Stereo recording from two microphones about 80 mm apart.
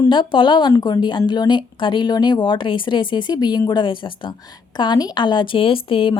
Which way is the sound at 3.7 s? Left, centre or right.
Left.